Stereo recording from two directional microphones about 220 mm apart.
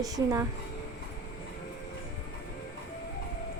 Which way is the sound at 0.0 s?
15° right (ahead or behind).